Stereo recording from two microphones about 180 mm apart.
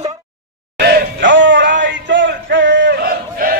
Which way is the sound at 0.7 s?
65° right (ahead or behind).